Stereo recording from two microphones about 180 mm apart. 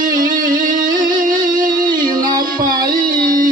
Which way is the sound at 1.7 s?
20° right (ahead or behind).